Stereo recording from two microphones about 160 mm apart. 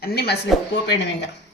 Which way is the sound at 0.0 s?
80° left.